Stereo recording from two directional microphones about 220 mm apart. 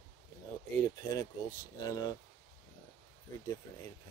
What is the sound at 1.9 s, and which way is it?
Speech, 20° left (ahead or behind).